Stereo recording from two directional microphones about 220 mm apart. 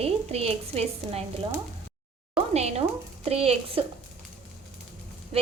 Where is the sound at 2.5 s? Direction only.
30° right (ahead or behind).